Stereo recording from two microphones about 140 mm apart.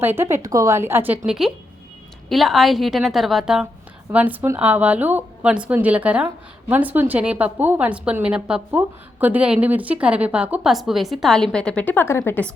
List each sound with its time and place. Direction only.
0.0 s a woman's voice: 15° right (ahead or behind); by 12.5 s 15° left (ahead or behind)